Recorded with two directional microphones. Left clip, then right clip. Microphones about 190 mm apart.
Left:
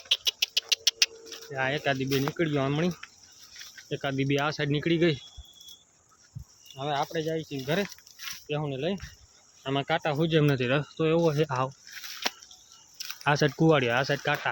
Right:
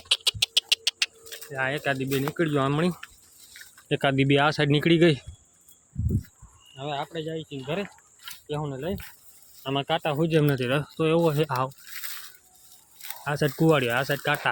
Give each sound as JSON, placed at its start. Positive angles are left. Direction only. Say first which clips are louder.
{"t": 0.1, "sound": "rodents", "louder": "right 3 dB", "side_deg": -20}
{"t": 0.9, "sound": "rodents", "louder": "left 1 dB", "side_deg": 0}
{"t": 1.5, "sound": "speech", "louder": "right 1 dB", "side_deg": -5}
{"t": 3.8, "sound": "speech", "louder": "right 7 dB", "side_deg": -40}
{"t": 6.7, "sound": "speech", "louder": "left 2 dB", "side_deg": 0}
{"t": 8.4, "sound": "speech", "louder": "even", "side_deg": -10}
{"t": 13.6, "sound": "speech", "louder": "right 1 dB", "side_deg": -5}